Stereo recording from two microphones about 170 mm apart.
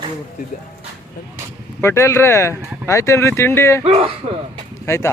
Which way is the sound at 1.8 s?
15° left (ahead or behind).